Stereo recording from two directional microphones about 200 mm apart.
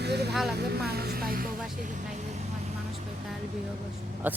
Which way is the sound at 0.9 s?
50° right (ahead or behind).